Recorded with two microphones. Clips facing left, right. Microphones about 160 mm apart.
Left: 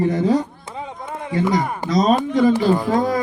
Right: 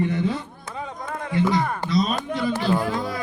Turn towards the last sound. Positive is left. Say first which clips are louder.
# left 6 dB
turn(degrees=45)  # may be behind; listen again after turning